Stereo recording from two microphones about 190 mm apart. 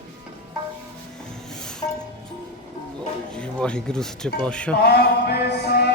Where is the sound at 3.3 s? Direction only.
5° left (ahead or behind).